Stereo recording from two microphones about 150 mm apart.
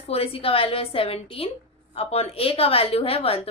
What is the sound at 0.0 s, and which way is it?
A woman's voice, 40° left (ahead or behind).